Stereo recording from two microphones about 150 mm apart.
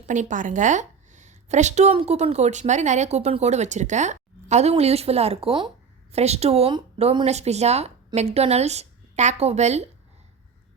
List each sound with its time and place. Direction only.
0.1 s a woman's voice: 55° right (ahead or behind); by 6.1 s 35° right (ahead or behind)
6.1 s speech: 45° right (ahead or behind)